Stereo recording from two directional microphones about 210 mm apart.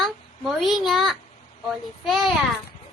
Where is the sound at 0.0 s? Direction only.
Centre (ahead or behind).